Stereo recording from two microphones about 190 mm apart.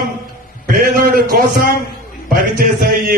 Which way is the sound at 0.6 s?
50° right (ahead or behind).